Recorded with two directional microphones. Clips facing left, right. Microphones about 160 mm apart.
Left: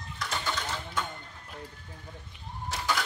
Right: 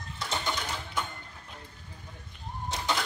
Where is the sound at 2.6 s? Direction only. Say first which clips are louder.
Even; 20° right (ahead or behind).